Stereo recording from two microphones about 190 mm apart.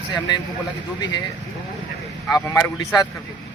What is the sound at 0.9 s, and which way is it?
Speech, 20° left (ahead or behind).